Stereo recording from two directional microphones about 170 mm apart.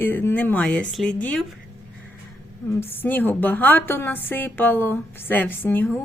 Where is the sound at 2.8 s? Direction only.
10° left (ahead or behind).